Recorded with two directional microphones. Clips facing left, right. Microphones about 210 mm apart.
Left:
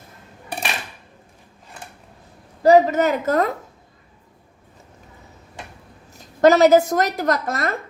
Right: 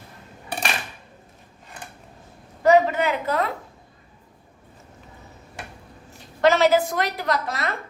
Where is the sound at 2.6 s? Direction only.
35° left (ahead or behind).